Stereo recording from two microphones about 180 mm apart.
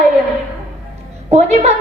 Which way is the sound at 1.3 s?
35° right (ahead or behind).